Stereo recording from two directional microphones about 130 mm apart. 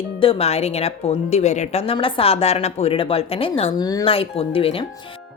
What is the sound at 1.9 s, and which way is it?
A woman's voice, 45° left (ahead or behind).